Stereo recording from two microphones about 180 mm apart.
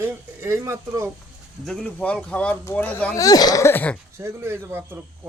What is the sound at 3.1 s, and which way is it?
Speech, 20° left (ahead or behind).